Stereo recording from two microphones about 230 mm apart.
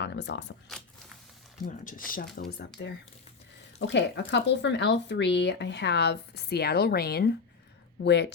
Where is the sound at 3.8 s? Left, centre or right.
Left.